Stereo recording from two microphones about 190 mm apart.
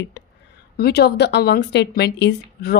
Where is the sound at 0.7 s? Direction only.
55° left (ahead or behind).